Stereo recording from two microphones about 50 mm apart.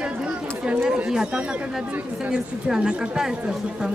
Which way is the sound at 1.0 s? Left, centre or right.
Centre.